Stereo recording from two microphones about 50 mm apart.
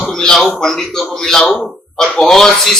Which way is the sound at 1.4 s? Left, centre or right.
Left.